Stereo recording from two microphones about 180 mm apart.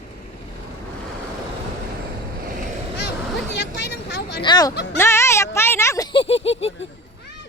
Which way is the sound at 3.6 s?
70° left (ahead or behind).